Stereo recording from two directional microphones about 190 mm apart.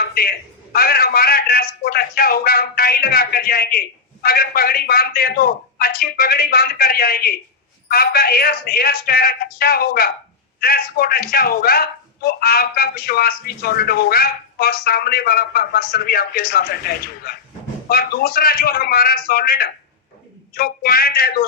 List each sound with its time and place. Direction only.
0.0 s a man's voice: 55° left (ahead or behind)